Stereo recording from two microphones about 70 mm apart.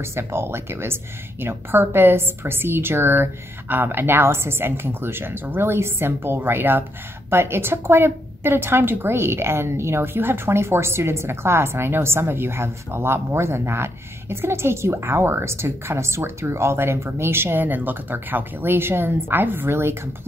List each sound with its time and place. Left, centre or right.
0.1 s a woman's voice: right